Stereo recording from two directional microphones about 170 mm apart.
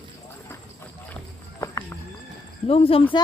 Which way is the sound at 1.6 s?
15° left (ahead or behind).